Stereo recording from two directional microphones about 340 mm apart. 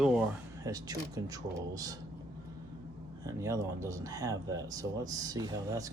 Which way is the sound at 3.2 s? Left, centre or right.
Centre.